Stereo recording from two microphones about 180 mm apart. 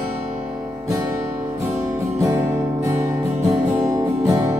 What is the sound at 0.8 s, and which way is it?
Music, 15° right (ahead or behind).